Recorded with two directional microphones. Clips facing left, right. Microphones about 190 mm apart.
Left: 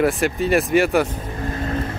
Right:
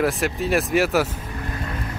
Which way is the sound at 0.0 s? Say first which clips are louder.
Left 3 dB; centre (ahead or behind).